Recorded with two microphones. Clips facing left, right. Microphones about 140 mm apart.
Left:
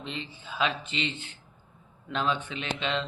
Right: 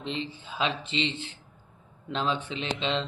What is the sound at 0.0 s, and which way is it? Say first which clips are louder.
Speech: right 4 dB; 30° right (ahead or behind).